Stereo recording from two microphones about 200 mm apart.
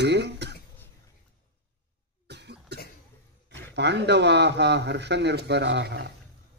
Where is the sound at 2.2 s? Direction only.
55° right (ahead or behind).